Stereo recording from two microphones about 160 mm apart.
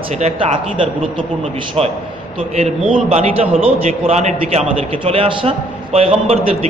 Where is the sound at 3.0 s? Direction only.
40° right (ahead or behind).